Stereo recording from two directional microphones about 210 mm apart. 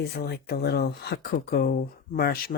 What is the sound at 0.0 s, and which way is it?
Speech, 50° left (ahead or behind).